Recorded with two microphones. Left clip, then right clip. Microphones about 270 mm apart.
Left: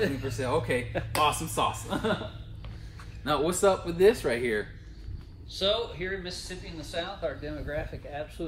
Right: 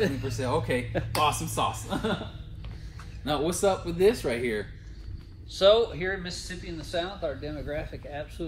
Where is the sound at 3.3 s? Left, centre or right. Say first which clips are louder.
Left 1 dB; centre.